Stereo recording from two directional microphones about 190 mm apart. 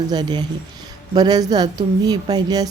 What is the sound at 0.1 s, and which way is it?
A woman's voice, 20° right (ahead or behind).